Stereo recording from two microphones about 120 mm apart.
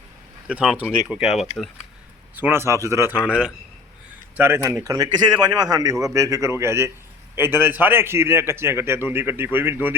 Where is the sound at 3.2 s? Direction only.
10° right (ahead or behind).